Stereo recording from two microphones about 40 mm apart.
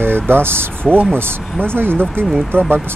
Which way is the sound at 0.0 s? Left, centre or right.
Right.